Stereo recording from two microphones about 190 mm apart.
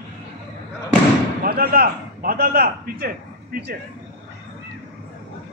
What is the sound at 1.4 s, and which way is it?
A man's voice, 55° right (ahead or behind).